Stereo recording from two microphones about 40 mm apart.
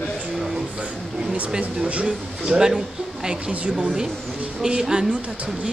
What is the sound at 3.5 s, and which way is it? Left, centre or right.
Speech, right.